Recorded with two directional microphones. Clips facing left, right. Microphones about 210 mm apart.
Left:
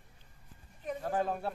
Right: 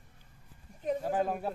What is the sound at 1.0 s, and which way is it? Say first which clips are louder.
Speech: left 1 dB; 10° right (ahead or behind).